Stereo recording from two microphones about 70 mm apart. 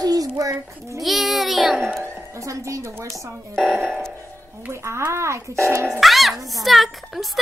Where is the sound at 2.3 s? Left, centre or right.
Right.